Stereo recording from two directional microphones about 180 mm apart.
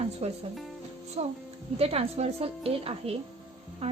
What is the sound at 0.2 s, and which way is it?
A woman's voice, 35° right (ahead or behind).